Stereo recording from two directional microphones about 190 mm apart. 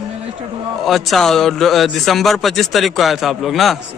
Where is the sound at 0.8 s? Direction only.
Centre (ahead or behind).